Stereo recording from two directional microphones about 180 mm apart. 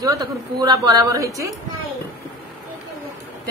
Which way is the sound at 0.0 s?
20° right (ahead or behind).